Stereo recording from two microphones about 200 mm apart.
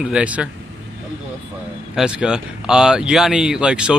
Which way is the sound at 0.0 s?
5° right (ahead or behind).